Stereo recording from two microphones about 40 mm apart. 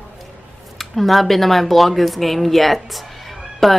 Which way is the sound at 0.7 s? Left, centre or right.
Centre.